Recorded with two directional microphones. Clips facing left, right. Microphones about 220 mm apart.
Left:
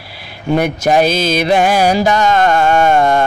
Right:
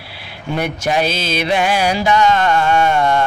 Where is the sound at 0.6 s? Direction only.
45° left (ahead or behind).